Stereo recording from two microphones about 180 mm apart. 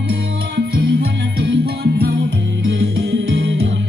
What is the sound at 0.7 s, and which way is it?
Jingle bell, 60° right (ahead or behind).